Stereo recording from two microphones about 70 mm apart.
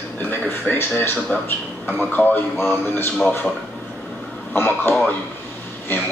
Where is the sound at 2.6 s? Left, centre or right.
Left.